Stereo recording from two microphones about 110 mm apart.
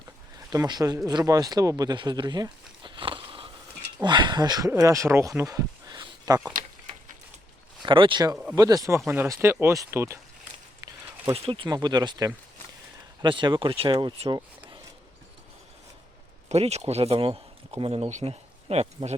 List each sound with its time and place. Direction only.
0.5 s speech: 35° right (ahead or behind)
2.8 s biting: 50° right (ahead or behind)
4.0 s speech: 40° right (ahead or behind); by 5.3 s 25° right (ahead or behind)
5.4 s a sound: 30° right (ahead or behind)
7.8 s speech: 50° right (ahead or behind)
8.5 s speech: 35° right (ahead or behind)
9.0 s speech: 20° right (ahead or behind)
11.4 s speech: 55° right (ahead or behind)
11.7 s speech: 40° right (ahead or behind)
16.5 s speech: 80° right